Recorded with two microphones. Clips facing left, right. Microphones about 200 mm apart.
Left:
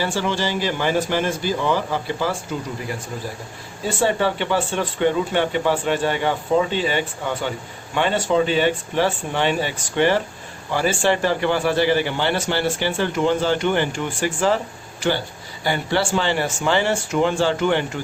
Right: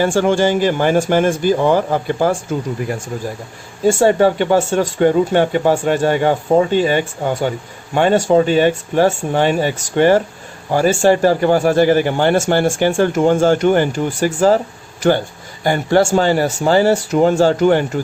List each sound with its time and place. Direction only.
0.0 s speech: 50° right (ahead or behind)
3.8 s speech: 45° right (ahead or behind)
15.6 s speech: 45° right (ahead or behind)